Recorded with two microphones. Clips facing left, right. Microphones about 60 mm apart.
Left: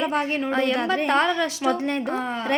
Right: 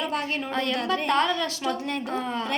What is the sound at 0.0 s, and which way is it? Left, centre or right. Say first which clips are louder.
A woman's voice: left 5 dB; left.